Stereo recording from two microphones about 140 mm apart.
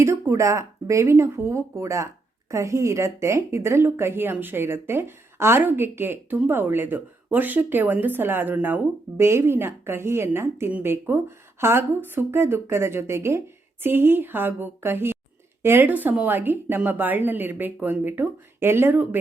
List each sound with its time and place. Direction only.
0.0 s a woman's voice: 20° right (ahead or behind)